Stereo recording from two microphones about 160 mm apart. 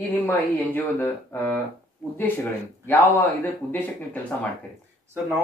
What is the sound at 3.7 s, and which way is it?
Speech, 10° left (ahead or behind).